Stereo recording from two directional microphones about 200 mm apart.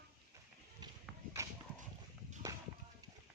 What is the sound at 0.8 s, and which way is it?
Horse, 20° right (ahead or behind).